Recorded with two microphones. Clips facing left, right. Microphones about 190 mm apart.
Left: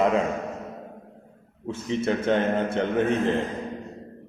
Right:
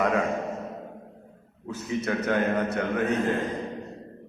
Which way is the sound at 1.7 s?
25° left (ahead or behind).